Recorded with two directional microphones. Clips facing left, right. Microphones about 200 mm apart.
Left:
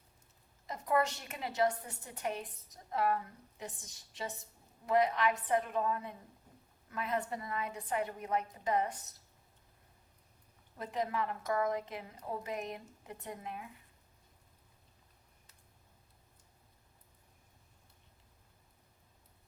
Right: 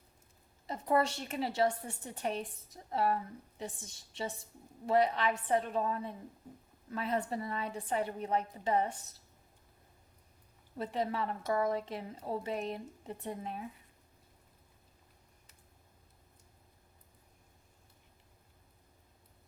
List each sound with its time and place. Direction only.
0.7 s a woman's voice: 30° right (ahead or behind)
4.9 s a woman's voice: 30° right (ahead or behind)
10.8 s a woman's voice: 30° right (ahead or behind)